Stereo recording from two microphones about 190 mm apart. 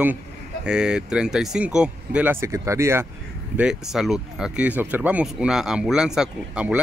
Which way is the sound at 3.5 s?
5° right (ahead or behind).